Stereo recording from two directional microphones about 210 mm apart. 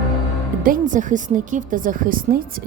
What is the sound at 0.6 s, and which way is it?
A woman's voice, 40° right (ahead or behind).